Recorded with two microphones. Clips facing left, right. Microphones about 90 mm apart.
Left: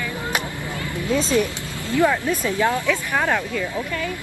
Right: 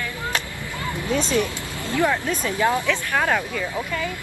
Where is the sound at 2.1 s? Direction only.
15° left (ahead or behind).